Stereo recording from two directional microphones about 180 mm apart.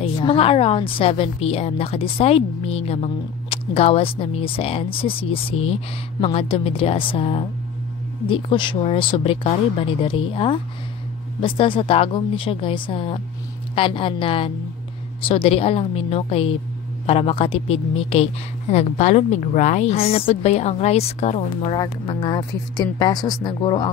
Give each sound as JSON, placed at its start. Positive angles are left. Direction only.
{"t": 0.0, "sound": "a woman's voice", "side_deg": 30}